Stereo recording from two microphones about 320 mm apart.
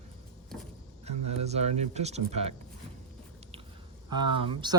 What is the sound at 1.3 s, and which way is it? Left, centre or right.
Speech, centre.